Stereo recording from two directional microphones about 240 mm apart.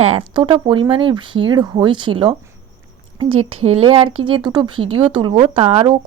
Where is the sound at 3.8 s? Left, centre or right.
Right.